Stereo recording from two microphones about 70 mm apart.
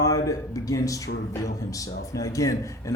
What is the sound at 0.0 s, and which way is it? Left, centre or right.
A man's voice, left.